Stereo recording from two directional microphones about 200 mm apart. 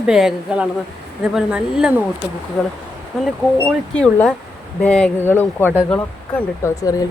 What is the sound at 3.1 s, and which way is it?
A woman's voice, centre (ahead or behind).